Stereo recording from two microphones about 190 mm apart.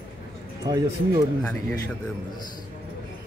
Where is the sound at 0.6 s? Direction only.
20° right (ahead or behind).